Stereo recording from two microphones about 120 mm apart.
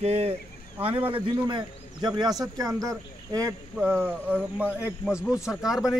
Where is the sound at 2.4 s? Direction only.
30° right (ahead or behind).